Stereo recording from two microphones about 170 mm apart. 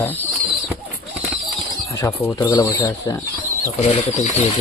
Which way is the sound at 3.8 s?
40° left (ahead or behind).